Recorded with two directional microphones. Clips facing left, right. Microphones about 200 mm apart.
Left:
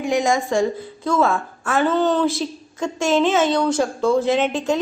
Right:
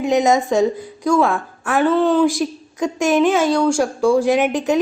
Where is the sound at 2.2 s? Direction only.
15° right (ahead or behind).